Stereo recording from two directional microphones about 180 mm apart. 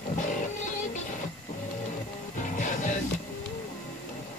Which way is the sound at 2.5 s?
45° left (ahead or behind).